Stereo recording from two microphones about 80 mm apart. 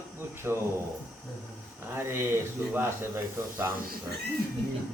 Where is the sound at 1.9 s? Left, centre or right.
Right.